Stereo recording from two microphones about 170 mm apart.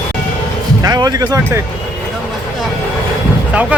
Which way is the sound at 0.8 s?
20° right (ahead or behind).